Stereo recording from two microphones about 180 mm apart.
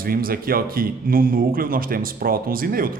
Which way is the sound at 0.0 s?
55° right (ahead or behind).